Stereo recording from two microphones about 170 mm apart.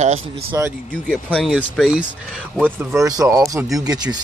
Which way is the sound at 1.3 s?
Centre (ahead or behind).